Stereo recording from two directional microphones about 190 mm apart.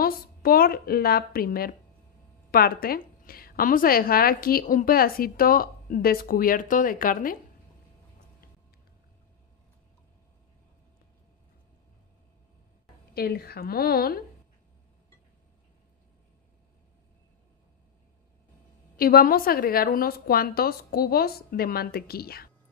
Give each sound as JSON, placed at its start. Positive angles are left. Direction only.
{"t": 0.0, "sound": "a woman's voice", "side_deg": 50}
{"t": 13.1, "sound": "a woman's voice", "side_deg": 55}
{"t": 18.9, "sound": "a woman's voice", "side_deg": 50}